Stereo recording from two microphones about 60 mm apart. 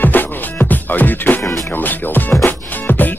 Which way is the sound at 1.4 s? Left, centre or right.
Left.